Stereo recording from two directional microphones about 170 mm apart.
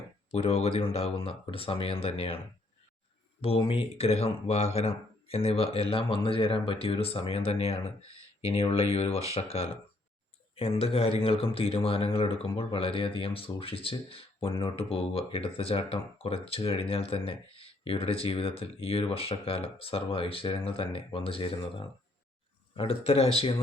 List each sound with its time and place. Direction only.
0.3 s speech: 40° left (ahead or behind)
3.4 s speech: 35° left (ahead or behind)